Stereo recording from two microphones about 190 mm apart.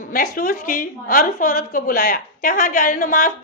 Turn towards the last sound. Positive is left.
turn(degrees=45)  # may be behind; listen again after turning